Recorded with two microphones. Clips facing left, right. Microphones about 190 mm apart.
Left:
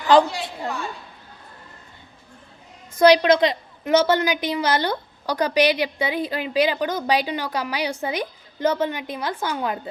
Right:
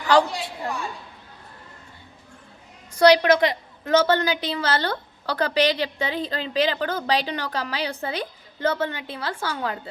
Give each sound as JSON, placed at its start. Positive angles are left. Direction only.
{"t": 0.1, "sound": "a woman's voice", "side_deg": 20}
{"t": 3.0, "sound": "a woman's voice", "side_deg": 20}